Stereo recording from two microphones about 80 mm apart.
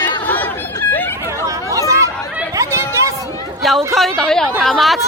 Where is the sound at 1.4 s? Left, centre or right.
Right.